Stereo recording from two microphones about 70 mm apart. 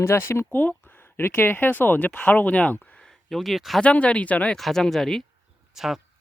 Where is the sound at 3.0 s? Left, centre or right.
Centre.